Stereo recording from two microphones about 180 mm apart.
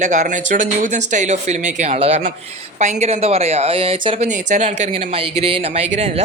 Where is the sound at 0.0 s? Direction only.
40° right (ahead or behind).